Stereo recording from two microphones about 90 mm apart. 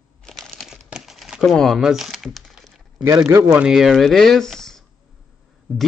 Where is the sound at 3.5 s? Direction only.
5° right (ahead or behind).